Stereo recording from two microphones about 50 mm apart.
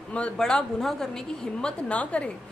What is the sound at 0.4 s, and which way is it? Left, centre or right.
A woman's voice, centre.